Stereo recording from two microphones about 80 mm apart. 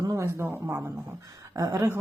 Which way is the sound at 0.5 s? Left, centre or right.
Right.